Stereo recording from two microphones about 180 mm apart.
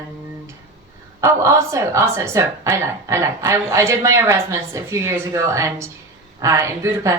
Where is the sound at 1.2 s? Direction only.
15° right (ahead or behind).